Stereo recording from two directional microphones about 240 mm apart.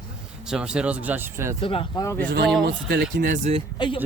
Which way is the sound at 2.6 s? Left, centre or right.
Right.